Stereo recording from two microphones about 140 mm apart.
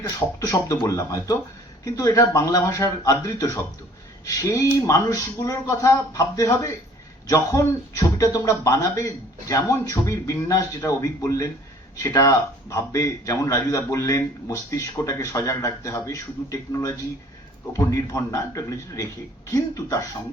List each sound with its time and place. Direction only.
0.0 s a man's voice: 25° left (ahead or behind)